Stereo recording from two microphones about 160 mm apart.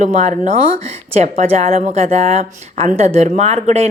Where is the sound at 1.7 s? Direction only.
60° right (ahead or behind).